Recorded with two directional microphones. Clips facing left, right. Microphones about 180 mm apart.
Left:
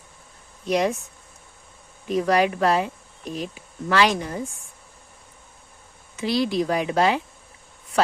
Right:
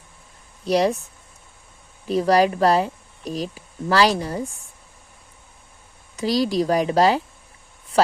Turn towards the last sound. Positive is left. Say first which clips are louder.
# right 3 dB
turn(degrees=-35)  # may be behind; listen again after turning